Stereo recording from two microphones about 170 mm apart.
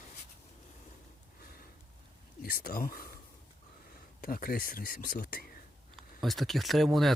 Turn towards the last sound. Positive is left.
turn(degrees=0)  # may be behind; listen again after turning